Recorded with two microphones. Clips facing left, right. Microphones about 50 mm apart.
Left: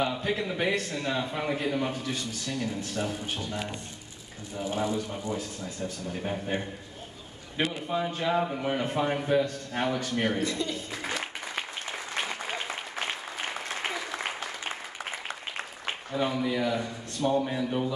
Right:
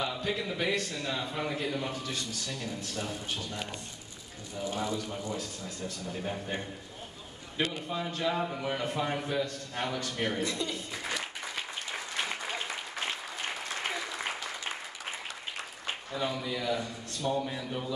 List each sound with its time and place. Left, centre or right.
0.0 s a man's voice: left
10.4 s a woman's voice: centre
13.7 s applause: left
16.1 s a man's voice: left